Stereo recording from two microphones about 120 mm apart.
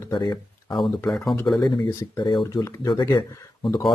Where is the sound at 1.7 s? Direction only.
35° left (ahead or behind).